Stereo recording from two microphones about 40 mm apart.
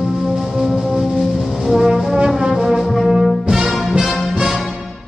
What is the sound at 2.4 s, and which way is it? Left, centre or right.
Brass instrument, centre.